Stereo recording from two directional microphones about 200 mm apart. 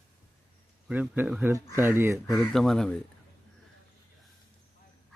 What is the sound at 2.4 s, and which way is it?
Speech, 5° left (ahead or behind).